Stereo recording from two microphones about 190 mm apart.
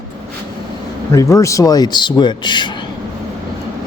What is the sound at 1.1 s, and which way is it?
Speech, 15° left (ahead or behind).